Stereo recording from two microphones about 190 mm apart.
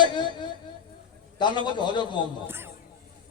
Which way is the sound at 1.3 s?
25° left (ahead or behind).